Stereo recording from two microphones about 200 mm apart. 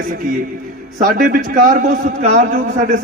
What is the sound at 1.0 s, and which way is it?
A man's voice, 45° right (ahead or behind).